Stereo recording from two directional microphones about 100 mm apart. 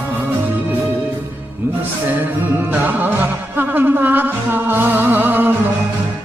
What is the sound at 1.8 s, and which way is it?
Music, 20° right (ahead or behind).